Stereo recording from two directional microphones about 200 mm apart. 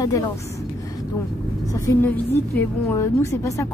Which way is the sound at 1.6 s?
15° left (ahead or behind).